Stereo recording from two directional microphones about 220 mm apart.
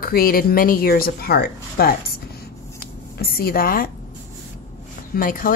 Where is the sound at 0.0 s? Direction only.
40° left (ahead or behind).